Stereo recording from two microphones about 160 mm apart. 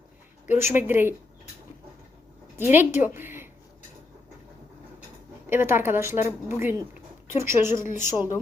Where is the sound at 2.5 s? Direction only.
15° right (ahead or behind).